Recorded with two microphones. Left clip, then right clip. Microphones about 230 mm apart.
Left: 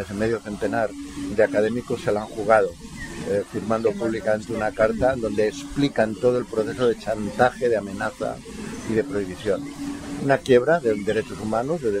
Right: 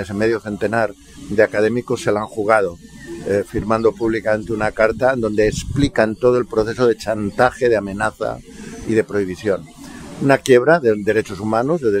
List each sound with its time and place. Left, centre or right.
0.0 s speech: right